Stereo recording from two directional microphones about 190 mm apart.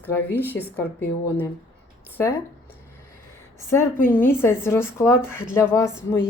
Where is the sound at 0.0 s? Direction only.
10° left (ahead or behind).